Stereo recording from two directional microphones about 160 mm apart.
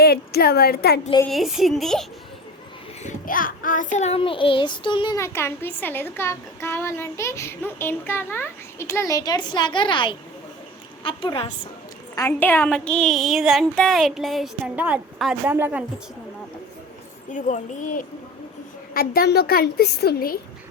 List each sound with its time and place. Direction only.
0.0 s a woman's voice: 80° left
1.3 s a woman's voice: centre (ahead or behind)
3.0 s a child's voice: 55° left (ahead or behind)
3.9 s a child's voice: 40° left (ahead or behind)
5.1 s a child's voice: 15° left (ahead or behind)
12.1 s a woman's voice: 15° left (ahead or behind); by 15.8 s 15° right (ahead or behind)
17.3 s speech: 50° left (ahead or behind)
18.9 s a woman's voice: 70° left (ahead or behind)